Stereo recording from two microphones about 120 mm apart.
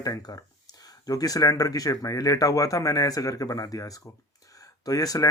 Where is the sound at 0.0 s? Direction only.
30° left (ahead or behind).